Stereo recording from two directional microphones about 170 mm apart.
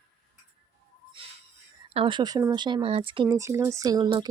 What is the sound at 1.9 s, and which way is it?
Speech, 30° right (ahead or behind).